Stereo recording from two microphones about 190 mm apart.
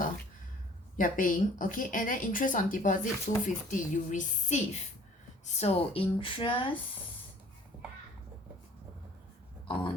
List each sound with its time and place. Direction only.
0.9 s speech: 45° left (ahead or behind); by 6.7 s 30° left (ahead or behind)